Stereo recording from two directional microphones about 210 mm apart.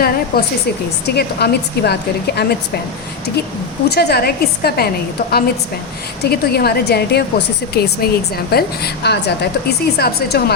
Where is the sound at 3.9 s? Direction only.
50° left (ahead or behind).